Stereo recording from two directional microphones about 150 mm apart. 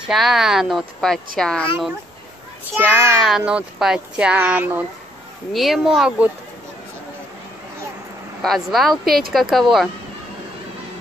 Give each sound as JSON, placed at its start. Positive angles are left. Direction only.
{"t": 0.0, "sound": "speech", "side_deg": 0}
{"t": 3.2, "sound": "speech", "side_deg": -5}
{"t": 5.5, "sound": "speech", "side_deg": 0}
{"t": 8.4, "sound": "speech", "side_deg": 0}